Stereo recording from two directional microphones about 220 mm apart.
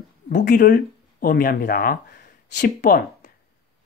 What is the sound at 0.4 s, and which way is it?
Speech, 40° left (ahead or behind).